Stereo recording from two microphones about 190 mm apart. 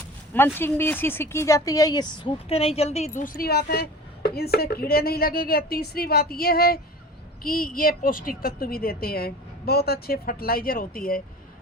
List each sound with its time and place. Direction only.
0.3 s speech: 10° left (ahead or behind); by 11.2 s 50° left (ahead or behind)